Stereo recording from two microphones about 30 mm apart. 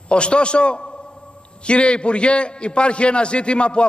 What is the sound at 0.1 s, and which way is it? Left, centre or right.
A man's voice, left.